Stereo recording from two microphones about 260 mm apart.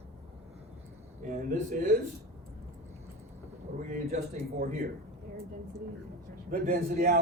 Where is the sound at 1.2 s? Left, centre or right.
Right.